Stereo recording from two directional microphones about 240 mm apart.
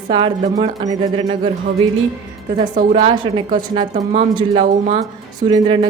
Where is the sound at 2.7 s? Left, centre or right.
Right.